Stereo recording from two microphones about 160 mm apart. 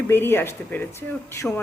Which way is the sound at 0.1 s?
15° left (ahead or behind).